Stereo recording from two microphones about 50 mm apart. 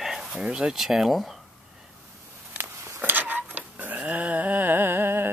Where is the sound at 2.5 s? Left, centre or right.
Right.